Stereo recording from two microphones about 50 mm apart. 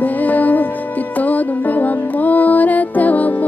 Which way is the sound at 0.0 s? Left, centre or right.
Left.